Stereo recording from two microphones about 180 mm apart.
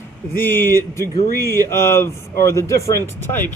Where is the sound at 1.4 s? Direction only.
20° right (ahead or behind).